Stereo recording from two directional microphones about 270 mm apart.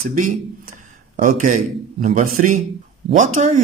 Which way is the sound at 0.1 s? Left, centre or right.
Right.